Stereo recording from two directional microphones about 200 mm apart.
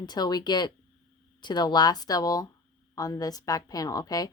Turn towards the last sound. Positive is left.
turn(degrees=20)  # may be behind; listen again after turning